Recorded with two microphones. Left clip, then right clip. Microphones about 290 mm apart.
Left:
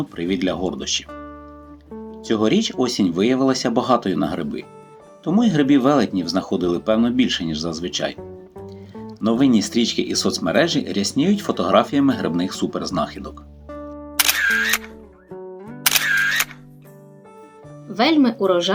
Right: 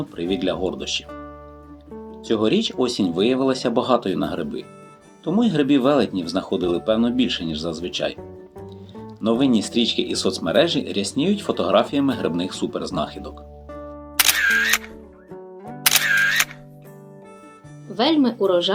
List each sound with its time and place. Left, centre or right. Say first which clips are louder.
0.2 s speech: even; left
2.2 s speech: left 1 dB; left
9.2 s speech: left 1 dB; left
13.7 s music: left 3 dB; centre
17.9 s speech: left 2 dB; left